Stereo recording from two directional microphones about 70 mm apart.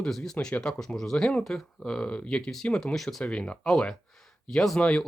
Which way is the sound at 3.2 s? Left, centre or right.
Centre.